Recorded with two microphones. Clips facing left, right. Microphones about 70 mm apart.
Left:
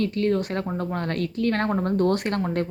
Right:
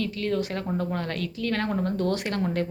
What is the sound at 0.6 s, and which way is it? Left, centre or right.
Speech, centre.